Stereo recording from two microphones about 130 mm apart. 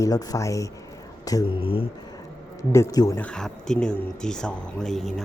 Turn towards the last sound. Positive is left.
turn(degrees=5)  # may be behind; listen again after turning